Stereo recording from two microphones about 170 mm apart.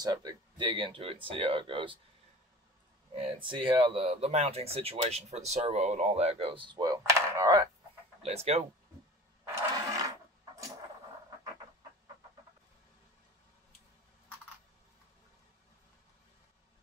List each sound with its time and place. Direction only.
0.0 s speech: 25° right (ahead or behind)
3.1 s speech: 35° right (ahead or behind)
8.2 s speech: 40° right (ahead or behind)
9.6 s a sound: 20° right (ahead or behind)